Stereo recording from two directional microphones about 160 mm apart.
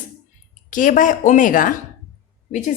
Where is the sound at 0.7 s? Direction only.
55° left (ahead or behind).